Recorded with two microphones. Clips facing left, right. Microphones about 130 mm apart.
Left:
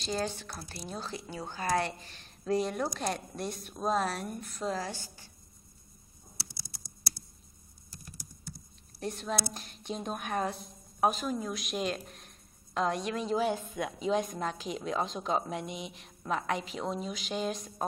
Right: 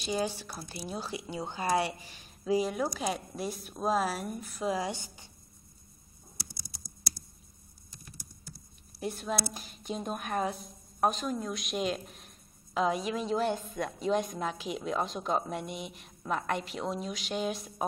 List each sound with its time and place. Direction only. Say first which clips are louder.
0.0 s speech: right 2 dB; 10° right (ahead or behind)
4.7 s a woman's voice: right 3 dB; 20° right (ahead or behind)
6.8 s computer keyboard: right 1 dB; 45° right (ahead or behind)
9.0 s a woman's voice: right 1 dB; centre (ahead or behind)